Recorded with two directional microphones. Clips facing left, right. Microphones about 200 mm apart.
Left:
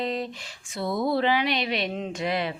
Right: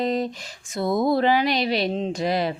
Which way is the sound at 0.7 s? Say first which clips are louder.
Right 4 dB; 45° right (ahead or behind).